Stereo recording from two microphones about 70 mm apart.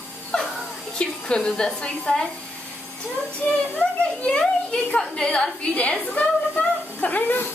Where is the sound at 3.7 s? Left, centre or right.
Centre.